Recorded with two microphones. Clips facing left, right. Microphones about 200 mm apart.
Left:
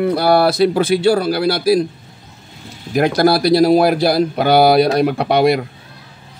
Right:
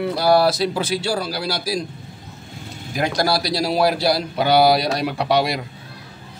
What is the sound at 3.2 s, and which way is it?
Speech, 55° left (ahead or behind).